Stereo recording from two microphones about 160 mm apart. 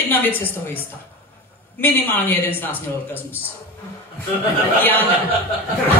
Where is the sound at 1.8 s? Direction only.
10° left (ahead or behind).